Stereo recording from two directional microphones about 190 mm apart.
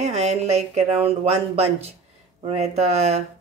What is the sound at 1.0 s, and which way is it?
Speech, 35° right (ahead or behind).